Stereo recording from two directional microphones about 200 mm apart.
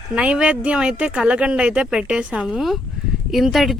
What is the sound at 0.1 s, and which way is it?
Speech, 5° right (ahead or behind).